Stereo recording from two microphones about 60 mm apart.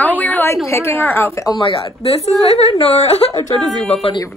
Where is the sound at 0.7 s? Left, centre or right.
Left.